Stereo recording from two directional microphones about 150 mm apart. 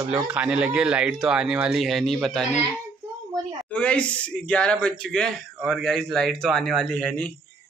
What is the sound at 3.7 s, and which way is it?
Speech, 10° left (ahead or behind).